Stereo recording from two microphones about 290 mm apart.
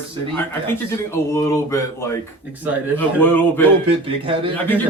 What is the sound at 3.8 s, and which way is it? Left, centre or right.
Speech, centre.